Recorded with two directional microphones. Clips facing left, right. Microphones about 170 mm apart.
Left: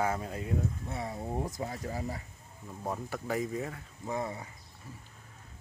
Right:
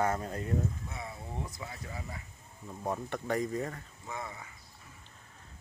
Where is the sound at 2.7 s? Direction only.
Centre (ahead or behind).